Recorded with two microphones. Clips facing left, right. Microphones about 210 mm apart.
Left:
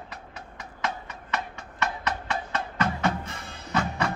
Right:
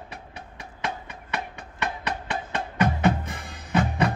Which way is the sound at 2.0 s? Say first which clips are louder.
Even; 15° right (ahead or behind).